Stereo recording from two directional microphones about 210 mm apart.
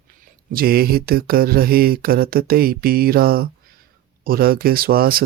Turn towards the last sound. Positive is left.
turn(degrees=-45)  # may be behind; listen again after turning